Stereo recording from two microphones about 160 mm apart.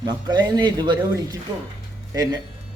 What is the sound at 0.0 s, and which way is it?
A man's voice, 25° right (ahead or behind).